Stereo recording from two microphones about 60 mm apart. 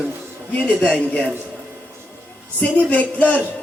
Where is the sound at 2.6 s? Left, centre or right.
Left.